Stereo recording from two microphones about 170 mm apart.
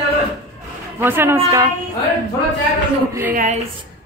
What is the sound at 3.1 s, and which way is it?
Speech, 10° right (ahead or behind).